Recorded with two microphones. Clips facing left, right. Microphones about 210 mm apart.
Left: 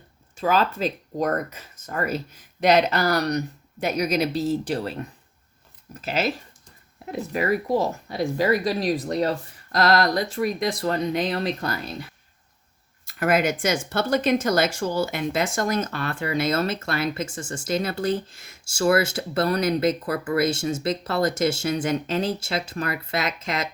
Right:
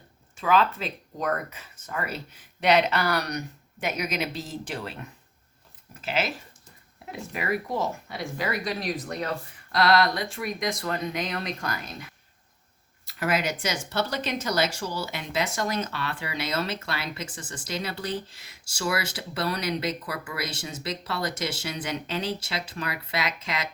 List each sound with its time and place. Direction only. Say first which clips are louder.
0.3 s speech: left 1 dB; 40° left (ahead or behind)
13.1 s speech: left 6 dB; 50° left (ahead or behind)